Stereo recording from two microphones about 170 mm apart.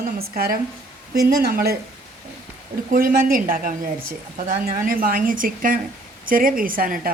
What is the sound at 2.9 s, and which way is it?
A woman's voice, 55° right (ahead or behind).